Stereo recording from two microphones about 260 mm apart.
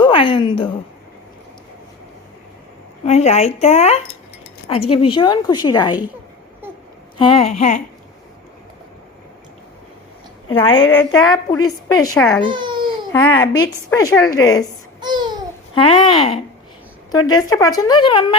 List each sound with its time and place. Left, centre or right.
0.0 s a woman's voice: centre
3.0 s speech: left
7.2 s speech: centre
10.5 s speech: centre
10.9 s speech: centre
12.4 s a child's voice: centre
13.1 s speech: centre
15.0 s babbling: centre
15.7 s speech: centre